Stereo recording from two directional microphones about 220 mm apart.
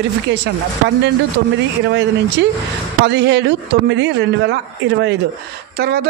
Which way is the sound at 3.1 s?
50° right (ahead or behind).